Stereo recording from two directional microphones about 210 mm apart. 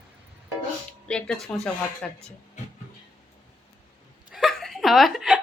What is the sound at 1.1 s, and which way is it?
Speech, 5° left (ahead or behind).